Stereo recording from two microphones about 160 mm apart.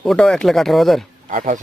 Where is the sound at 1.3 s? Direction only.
55° right (ahead or behind).